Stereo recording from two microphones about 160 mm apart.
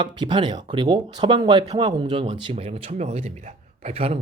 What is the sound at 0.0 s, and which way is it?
A man's voice, 30° right (ahead or behind).